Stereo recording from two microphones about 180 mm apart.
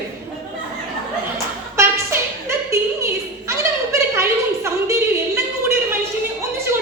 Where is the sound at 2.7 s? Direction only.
15° right (ahead or behind).